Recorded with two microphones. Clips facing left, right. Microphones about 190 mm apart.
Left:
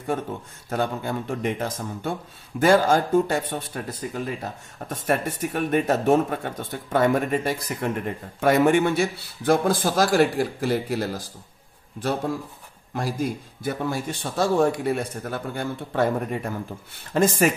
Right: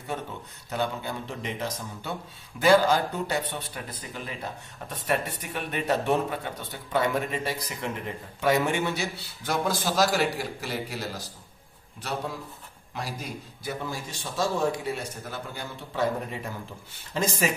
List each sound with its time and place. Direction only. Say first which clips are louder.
0.7 s speech: left 4 dB; 50° left (ahead or behind)
12.9 s a man's voice: left 9 dB; 50° left (ahead or behind)